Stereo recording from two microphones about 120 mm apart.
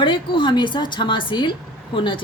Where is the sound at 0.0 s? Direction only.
45° left (ahead or behind).